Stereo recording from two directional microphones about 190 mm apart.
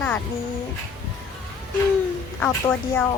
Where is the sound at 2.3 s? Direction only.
5° left (ahead or behind).